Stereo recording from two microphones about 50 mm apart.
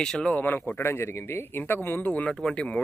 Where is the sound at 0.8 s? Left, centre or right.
Left.